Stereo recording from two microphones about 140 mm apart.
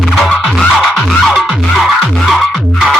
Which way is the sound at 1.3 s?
Centre (ahead or behind).